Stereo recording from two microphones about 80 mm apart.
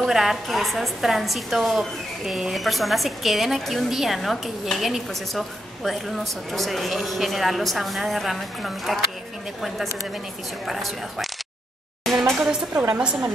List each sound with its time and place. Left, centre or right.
0.0 s a woman's voice: centre
10.7 s a woman's voice: centre
12.0 s a sound: centre
12.9 s a woman's voice: centre